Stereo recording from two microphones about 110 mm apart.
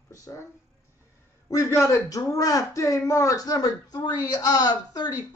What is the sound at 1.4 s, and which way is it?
Speech, 30° left (ahead or behind).